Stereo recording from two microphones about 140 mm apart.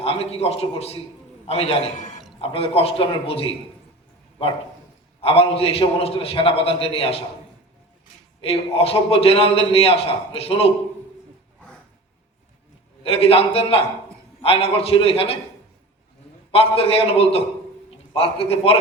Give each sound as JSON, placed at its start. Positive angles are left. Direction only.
{"t": 0.0, "sound": "a man's voice", "side_deg": 45}
{"t": 5.2, "sound": "a man's voice", "side_deg": 45}
{"t": 8.4, "sound": "a man's voice", "side_deg": 45}
{"t": 13.0, "sound": "a man's voice", "side_deg": 45}
{"t": 16.5, "sound": "a man's voice", "side_deg": 45}